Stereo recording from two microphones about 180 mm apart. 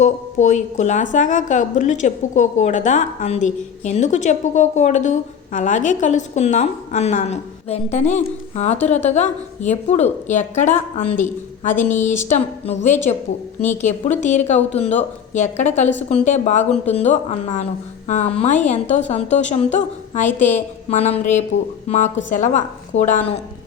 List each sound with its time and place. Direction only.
0.0 s a woman's voice: 40° left (ahead or behind)
14.2 s a woman's voice: 40° left (ahead or behind)